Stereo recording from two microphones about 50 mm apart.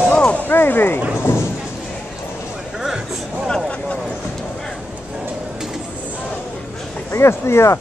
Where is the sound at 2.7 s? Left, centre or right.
Centre.